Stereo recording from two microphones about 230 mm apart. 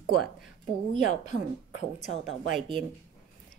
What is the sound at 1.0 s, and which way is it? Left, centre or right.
A woman's voice, left.